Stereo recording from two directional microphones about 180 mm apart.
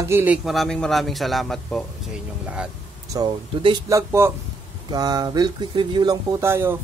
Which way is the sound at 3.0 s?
20° right (ahead or behind).